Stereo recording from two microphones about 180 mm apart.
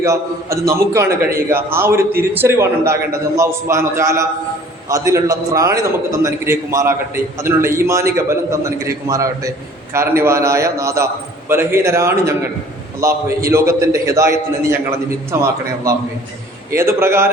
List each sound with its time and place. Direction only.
0.0 s a man's voice: 15° right (ahead or behind)